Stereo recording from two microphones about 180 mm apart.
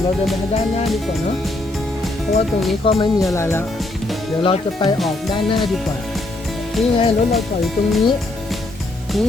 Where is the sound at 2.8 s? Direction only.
30° left (ahead or behind).